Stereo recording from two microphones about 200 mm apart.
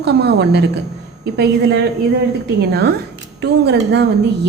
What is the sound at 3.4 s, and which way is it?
Speech, 60° right (ahead or behind).